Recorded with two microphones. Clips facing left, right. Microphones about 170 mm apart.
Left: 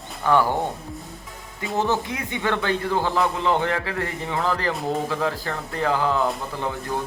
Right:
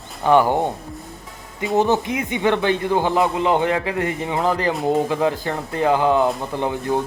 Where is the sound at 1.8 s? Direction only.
20° right (ahead or behind).